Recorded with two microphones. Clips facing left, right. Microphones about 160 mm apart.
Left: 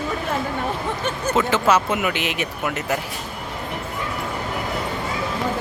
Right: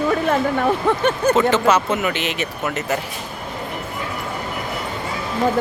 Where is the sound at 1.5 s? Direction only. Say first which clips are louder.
Right 2 dB; 5° left (ahead or behind).